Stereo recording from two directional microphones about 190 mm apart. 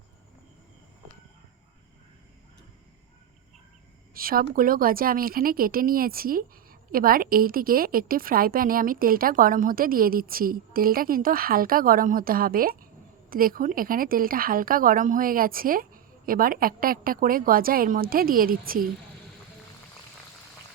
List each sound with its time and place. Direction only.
4.1 s speech: 50° right (ahead or behind)